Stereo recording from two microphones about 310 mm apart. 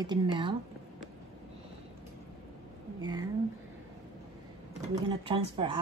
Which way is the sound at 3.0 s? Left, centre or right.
Centre.